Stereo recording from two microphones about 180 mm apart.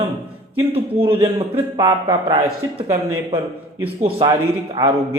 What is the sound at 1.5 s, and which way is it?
A man's voice, 20° right (ahead or behind).